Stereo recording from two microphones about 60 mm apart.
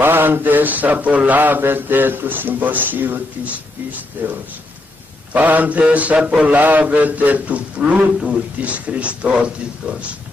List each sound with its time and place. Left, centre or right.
0.0 s speech: right
5.3 s a man's voice: right